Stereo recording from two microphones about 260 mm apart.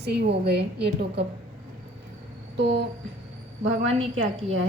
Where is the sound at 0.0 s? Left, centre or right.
Right.